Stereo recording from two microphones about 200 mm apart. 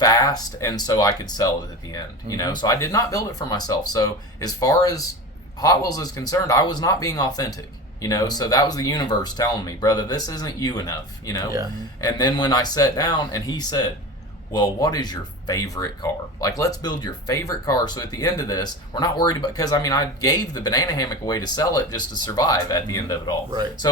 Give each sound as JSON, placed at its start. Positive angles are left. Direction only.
{"t": 0.0, "sound": "speech", "side_deg": 20}